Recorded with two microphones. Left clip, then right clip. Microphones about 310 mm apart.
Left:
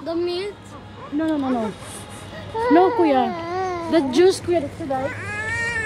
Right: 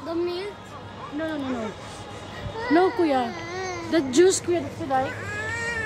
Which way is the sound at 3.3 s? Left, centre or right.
Centre.